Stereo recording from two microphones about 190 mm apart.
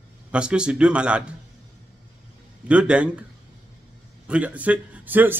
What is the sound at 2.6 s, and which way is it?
Speech, 5° right (ahead or behind).